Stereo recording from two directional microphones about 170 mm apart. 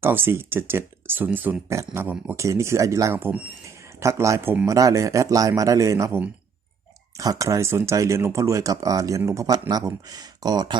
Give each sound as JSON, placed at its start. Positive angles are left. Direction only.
{"t": 0.0, "sound": "speech", "side_deg": -10}